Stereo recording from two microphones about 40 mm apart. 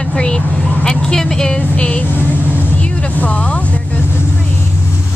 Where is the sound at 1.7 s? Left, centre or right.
Left.